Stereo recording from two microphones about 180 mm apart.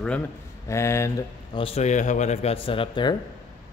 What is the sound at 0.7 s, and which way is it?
Speech, 15° left (ahead or behind).